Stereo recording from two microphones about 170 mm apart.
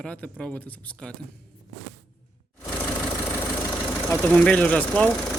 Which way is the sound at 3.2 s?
10° left (ahead or behind).